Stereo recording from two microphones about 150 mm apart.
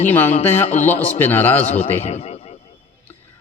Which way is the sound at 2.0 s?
45° left (ahead or behind).